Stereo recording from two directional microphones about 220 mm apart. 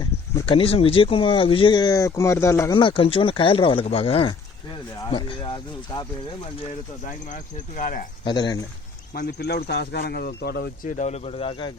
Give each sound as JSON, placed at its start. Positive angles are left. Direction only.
{"t": 0.0, "sound": "speech", "side_deg": 20}
{"t": 7.3, "sound": "speech", "side_deg": 35}
{"t": 8.2, "sound": "speech", "side_deg": 20}
{"t": 9.1, "sound": "speech", "side_deg": 50}